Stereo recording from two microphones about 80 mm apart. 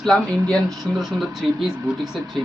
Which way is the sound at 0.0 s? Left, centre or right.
Centre.